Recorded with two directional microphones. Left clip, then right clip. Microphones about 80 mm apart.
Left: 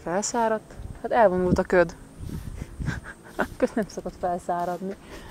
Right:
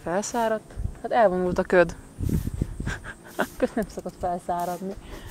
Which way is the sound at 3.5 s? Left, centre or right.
Centre.